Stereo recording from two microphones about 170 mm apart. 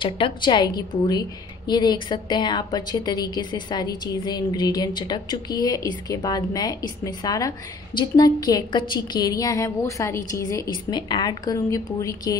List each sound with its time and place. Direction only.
0.0 s a woman's voice: 30° left (ahead or behind)